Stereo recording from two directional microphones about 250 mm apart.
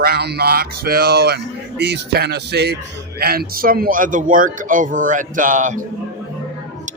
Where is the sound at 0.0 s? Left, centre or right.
Right.